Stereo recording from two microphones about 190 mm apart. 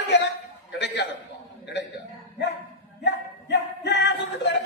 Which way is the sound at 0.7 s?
65° left (ahead or behind).